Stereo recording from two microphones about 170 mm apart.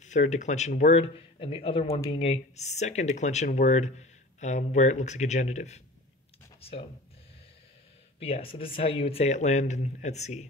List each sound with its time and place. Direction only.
0.0 s speech: 45° left (ahead or behind)
8.2 s speech: 35° left (ahead or behind)